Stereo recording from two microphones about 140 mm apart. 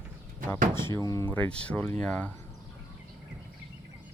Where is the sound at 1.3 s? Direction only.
10° left (ahead or behind).